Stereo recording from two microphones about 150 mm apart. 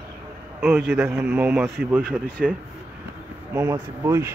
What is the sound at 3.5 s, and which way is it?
Speech, 20° right (ahead or behind).